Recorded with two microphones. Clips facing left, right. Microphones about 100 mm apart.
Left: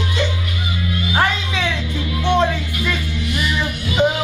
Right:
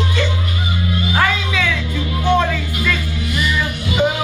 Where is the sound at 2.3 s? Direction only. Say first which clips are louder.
Even; 20° left (ahead or behind).